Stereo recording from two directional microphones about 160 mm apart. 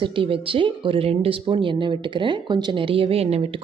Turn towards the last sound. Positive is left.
turn(degrees=-40)  # may be behind; listen again after turning